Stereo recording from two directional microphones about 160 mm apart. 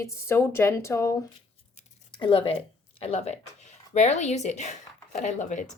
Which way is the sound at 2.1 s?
30° left (ahead or behind).